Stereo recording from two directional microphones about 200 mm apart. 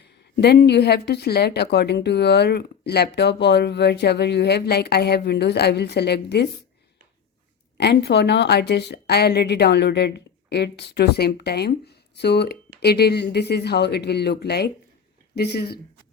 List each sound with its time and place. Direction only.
0.0 s a woman's voice: 55° left (ahead or behind)
7.8 s a woman's voice: 55° left (ahead or behind)